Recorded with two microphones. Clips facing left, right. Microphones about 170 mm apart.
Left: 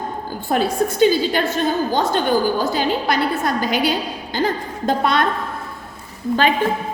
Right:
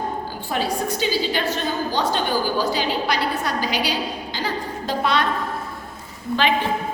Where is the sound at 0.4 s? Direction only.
50° left (ahead or behind).